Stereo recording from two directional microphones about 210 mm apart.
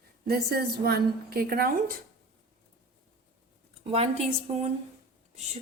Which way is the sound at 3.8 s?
30° right (ahead or behind).